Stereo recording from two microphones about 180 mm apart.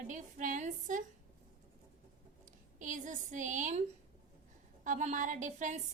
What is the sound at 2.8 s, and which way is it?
A woman's voice, 45° right (ahead or behind).